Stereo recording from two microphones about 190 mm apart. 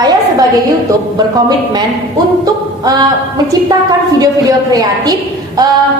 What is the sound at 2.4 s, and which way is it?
Singing, 20° right (ahead or behind).